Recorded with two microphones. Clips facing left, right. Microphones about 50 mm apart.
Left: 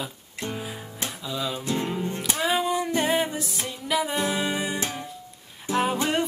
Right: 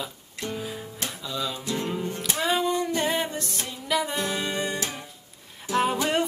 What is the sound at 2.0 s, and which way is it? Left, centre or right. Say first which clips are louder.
Music: left 1 dB; left.